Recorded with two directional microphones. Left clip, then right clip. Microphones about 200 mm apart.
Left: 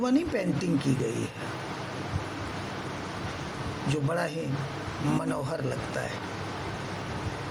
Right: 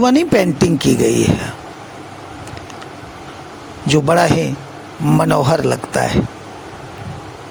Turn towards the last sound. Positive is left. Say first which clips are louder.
# right 15 dB
turn(degrees=-55)  # may be behind; listen again after turning